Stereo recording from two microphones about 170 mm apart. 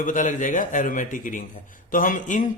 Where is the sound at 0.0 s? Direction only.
50° left (ahead or behind).